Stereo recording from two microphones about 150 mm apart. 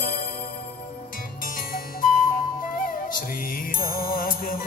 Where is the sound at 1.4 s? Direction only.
70° left (ahead or behind).